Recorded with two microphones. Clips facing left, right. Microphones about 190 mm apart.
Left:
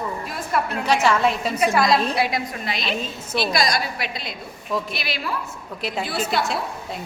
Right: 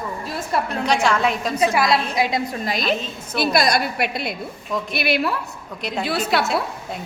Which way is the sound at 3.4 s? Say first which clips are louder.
Right 4 dB; 55° right (ahead or behind).